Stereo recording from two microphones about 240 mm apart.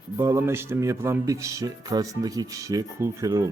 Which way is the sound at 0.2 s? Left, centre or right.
Centre.